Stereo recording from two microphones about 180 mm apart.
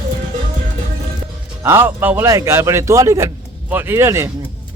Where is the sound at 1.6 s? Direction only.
10° right (ahead or behind).